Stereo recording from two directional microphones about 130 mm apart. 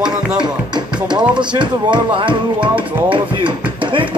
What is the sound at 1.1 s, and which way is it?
Speech, 35° right (ahead or behind).